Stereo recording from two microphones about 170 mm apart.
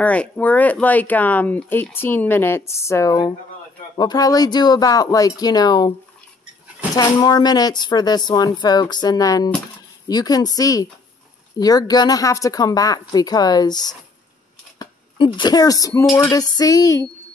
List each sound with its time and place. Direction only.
0.0 s speech: 10° left (ahead or behind)
7.0 s speech: 25° left (ahead or behind)